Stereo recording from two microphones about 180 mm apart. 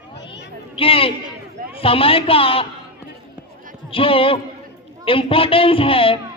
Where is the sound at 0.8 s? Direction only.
30° left (ahead or behind).